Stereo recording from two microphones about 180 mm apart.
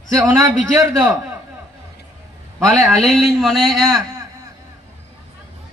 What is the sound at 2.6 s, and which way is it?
A man's voice, centre (ahead or behind).